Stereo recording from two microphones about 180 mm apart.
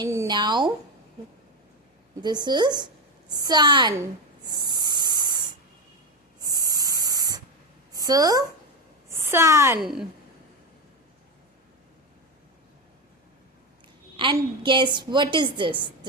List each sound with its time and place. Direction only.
0.0 s a woman's voice: 20° right (ahead or behind)
2.2 s a woman's voice: 25° right (ahead or behind)
4.4 s a sound: 25° right (ahead or behind)
6.4 s owl: 20° right (ahead or behind)
7.9 s a woman's voice: 20° right (ahead or behind)
9.8 s a woman's voice: centre (ahead or behind)
14.2 s a woman's voice: 25° right (ahead or behind)